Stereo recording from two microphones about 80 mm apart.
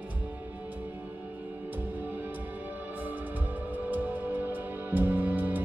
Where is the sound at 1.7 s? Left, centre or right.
Right.